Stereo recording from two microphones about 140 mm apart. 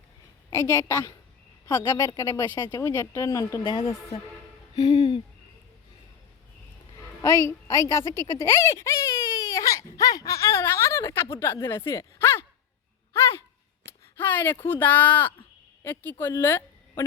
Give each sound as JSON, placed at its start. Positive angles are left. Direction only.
{"t": 0.5, "sound": "a woman's voice", "side_deg": 20}
{"t": 3.6, "sound": "a woman's voice", "side_deg": 35}
{"t": 4.8, "sound": "a sound", "side_deg": 45}
{"t": 7.2, "sound": "a woman's voice", "side_deg": 20}
{"t": 13.1, "sound": "sigh", "side_deg": 20}
{"t": 13.8, "sound": "a woman's voice", "side_deg": 15}